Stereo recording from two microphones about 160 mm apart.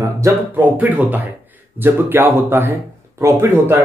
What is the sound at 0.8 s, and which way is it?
Speech, 10° right (ahead or behind).